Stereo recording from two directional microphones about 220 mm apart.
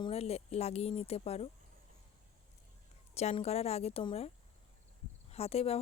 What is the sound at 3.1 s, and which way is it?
Speech, 30° left (ahead or behind).